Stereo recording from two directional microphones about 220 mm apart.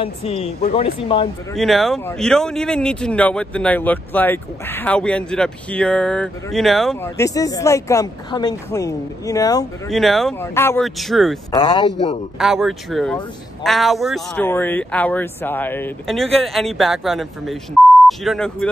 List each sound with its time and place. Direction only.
0.0 s speech: 25° left (ahead or behind)
1.5 s speech: centre (ahead or behind)
7.2 s speech: 15° left (ahead or behind)
9.8 s speech: centre (ahead or behind)
10.4 s speech: 10° left (ahead or behind)
10.8 s speech: centre (ahead or behind)
11.5 s speech: 20° left (ahead or behind)
12.4 s speech: centre (ahead or behind)